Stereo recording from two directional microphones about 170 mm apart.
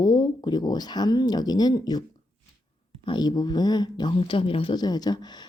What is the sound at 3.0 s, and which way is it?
Speech, 25° left (ahead or behind).